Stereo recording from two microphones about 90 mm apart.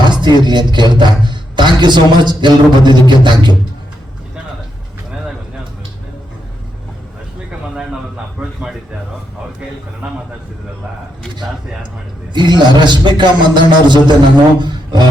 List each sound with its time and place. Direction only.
0.1 s music: 55° right (ahead or behind)
0.4 s speech: 55° right (ahead or behind)
12.3 s speech: 55° right (ahead or behind)
14.6 s a sound: 55° right (ahead or behind)